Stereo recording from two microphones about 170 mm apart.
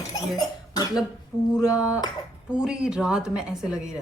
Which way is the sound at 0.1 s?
20° left (ahead or behind).